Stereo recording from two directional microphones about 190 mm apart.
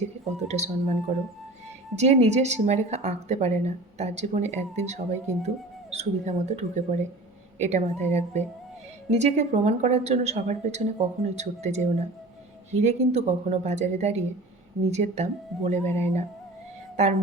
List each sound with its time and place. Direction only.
0.3 s a woman's voice: 35° right (ahead or behind)
2.0 s a woman's voice: 35° right (ahead or behind)